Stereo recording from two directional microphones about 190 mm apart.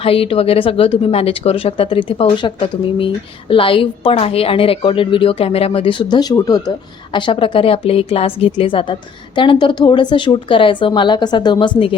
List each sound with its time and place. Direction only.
0.0 s a woman's voice: 30° left (ahead or behind)